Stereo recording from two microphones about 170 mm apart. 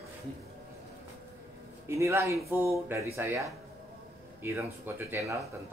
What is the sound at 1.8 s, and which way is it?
Speech, 15° right (ahead or behind).